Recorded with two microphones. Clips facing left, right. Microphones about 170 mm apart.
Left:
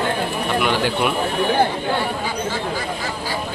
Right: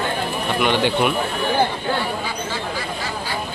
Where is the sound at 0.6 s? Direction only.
Centre (ahead or behind).